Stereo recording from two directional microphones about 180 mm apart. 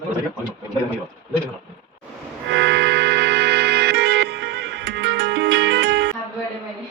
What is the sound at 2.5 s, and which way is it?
Music, 80° right.